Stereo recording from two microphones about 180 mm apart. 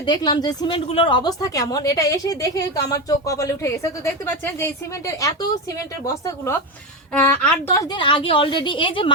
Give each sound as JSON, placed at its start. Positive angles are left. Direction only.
{"t": 0.0, "sound": "a woman's voice", "side_deg": 25}